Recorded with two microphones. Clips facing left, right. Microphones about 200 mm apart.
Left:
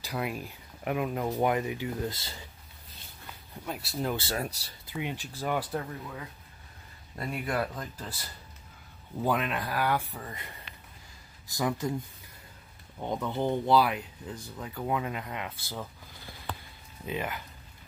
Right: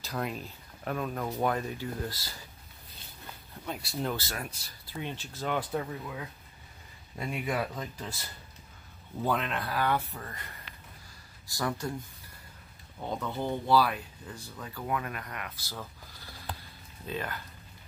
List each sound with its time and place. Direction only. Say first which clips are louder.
0.0 s speech: left 1 dB; 10° left (ahead or behind)
3.6 s speech: left 1 dB; centre (ahead or behind)
4.3 s speech: left 6 dB; 30° left (ahead or behind)
4.9 s speech: left 3 dB; 15° left (ahead or behind)
7.2 s speech: left 1 dB; centre (ahead or behind)
9.2 s speech: left 2 dB; 10° left (ahead or behind)
11.4 s speech: left 3 dB; 20° left (ahead or behind)
15.7 s neigh: left 3 dB; 15° left (ahead or behind)
17.0 s speech: left 2 dB; 15° left (ahead or behind)